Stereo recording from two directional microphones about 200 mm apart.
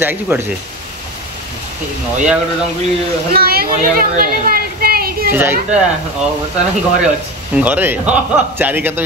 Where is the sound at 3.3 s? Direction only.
50° right (ahead or behind).